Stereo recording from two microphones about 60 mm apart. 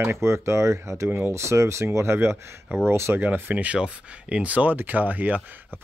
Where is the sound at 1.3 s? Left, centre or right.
Right.